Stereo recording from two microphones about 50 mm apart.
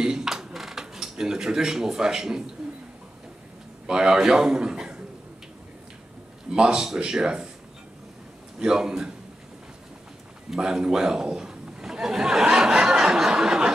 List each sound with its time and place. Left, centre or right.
0.0 s dishes: centre
3.8 s a man's voice: centre
6.5 s speech: centre
8.5 s speech: centre
10.5 s a sound: centre